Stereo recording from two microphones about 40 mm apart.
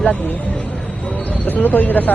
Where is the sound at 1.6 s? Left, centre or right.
Left.